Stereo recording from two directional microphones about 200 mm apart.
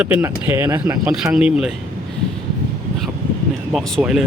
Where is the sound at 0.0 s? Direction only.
10° right (ahead or behind).